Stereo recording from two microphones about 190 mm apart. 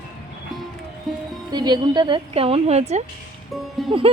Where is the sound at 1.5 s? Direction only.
20° right (ahead or behind).